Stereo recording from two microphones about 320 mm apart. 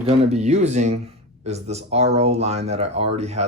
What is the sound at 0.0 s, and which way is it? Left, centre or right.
Speech, right.